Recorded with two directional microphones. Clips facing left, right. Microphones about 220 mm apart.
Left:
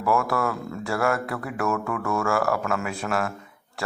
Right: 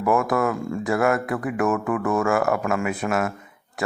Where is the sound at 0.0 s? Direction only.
20° right (ahead or behind).